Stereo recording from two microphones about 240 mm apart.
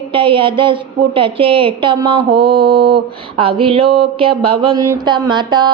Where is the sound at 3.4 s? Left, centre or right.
Right.